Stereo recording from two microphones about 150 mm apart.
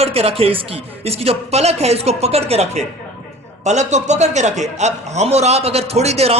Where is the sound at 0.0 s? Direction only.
40° right (ahead or behind).